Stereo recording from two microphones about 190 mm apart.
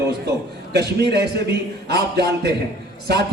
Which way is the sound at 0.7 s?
60° right (ahead or behind).